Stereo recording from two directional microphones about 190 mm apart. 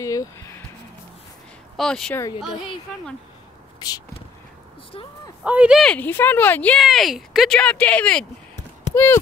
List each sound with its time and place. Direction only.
0.0 s speech: 15° left (ahead or behind)
1.8 s speech: 5° left (ahead or behind)
5.4 s speech: 5° right (ahead or behind); by 9.2 s 10° left (ahead or behind)